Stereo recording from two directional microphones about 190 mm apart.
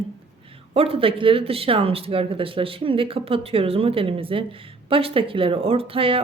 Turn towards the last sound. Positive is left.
turn(degrees=-30)  # may be behind; listen again after turning